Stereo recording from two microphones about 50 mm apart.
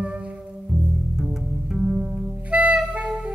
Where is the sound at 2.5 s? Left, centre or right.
Right.